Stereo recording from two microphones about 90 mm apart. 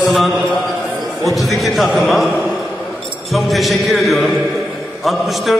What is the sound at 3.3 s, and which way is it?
A man's voice, centre (ahead or behind).